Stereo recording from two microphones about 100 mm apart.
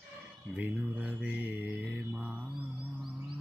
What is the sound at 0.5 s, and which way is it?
Speech, 15° right (ahead or behind).